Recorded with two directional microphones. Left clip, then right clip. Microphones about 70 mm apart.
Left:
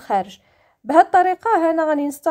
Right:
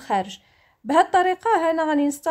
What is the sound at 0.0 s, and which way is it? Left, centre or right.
A woman's voice, left.